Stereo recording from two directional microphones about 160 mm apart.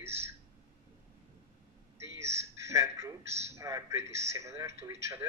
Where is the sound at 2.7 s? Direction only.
20° right (ahead or behind).